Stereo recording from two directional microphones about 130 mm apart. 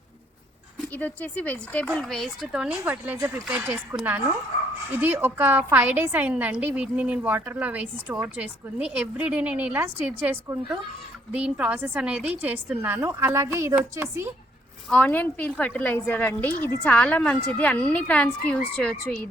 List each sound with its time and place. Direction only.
0.9 s speech: 10° left (ahead or behind); by 3.2 s 10° right (ahead or behind)
3.2 s speech: 20° right (ahead or behind)
3.8 s a woman's voice: 10° right (ahead or behind)
14.8 s a woman's voice: 10° left (ahead or behind)